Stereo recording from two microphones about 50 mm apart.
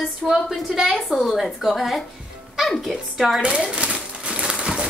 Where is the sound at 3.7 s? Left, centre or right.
Right.